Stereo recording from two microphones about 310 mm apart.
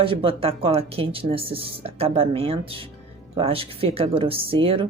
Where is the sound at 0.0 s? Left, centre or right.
Centre.